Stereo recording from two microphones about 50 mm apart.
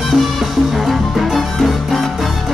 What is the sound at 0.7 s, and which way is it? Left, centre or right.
Music, centre.